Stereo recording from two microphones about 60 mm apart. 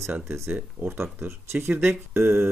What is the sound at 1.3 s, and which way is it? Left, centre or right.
Speech, right.